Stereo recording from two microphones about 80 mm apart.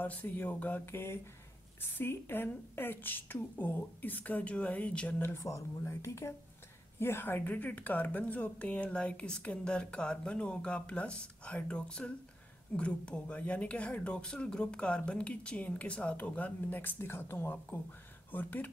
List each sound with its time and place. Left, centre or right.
0.0 s a woman's voice: left
5.3 s a woman's voice: left